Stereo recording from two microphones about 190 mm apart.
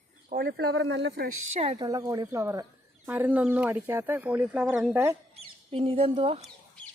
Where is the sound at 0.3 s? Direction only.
55° right (ahead or behind).